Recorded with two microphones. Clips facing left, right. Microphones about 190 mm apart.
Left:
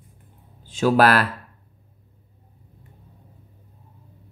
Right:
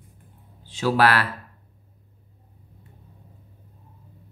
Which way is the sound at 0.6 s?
50° left (ahead or behind).